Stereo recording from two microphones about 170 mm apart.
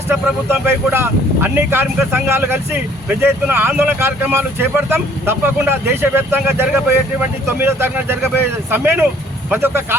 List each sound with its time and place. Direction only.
0.1 s speech: 15° right (ahead or behind)